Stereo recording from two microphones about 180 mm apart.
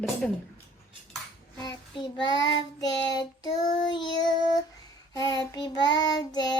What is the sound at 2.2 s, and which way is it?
Child singing, 20° left (ahead or behind).